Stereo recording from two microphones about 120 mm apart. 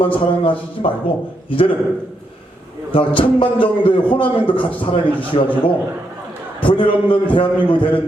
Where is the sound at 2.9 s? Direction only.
50° left (ahead or behind).